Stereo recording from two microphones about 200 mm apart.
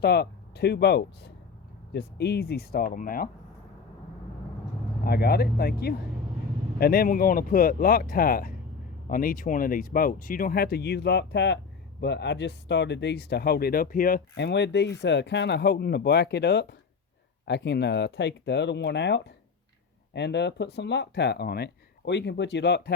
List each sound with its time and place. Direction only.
0.0 s speech: 55° left (ahead or behind)
5.0 s speech: 50° left (ahead or behind)